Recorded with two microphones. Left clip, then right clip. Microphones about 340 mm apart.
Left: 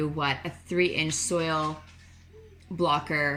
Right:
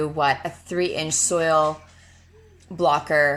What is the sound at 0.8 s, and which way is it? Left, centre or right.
Speech, centre.